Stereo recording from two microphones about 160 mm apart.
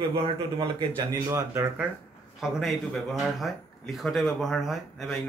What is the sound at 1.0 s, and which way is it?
Speech, 20° right (ahead or behind).